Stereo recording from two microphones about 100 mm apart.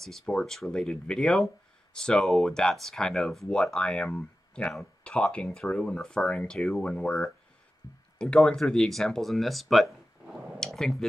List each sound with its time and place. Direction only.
0.0 s speech: 5° left (ahead or behind)
7.8 s speech: 40° left (ahead or behind)
8.2 s speech: 10° left (ahead or behind)